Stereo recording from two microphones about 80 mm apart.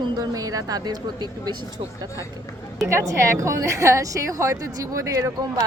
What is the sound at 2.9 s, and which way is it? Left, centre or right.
A woman's voice, right.